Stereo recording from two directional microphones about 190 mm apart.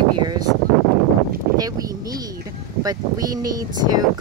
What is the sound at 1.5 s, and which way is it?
Speech, 20° right (ahead or behind).